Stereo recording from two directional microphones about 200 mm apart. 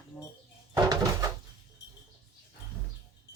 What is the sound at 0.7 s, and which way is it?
Door, 20° right (ahead or behind).